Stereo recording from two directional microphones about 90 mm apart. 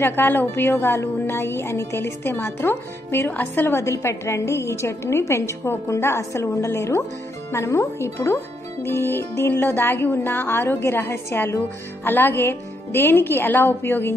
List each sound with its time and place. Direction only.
0.0 s speech: 25° left (ahead or behind)